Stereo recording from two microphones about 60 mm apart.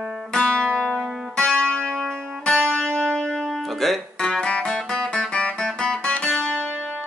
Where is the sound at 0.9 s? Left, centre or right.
Centre.